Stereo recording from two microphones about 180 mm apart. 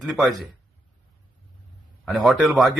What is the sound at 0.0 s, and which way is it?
Speech, centre (ahead or behind).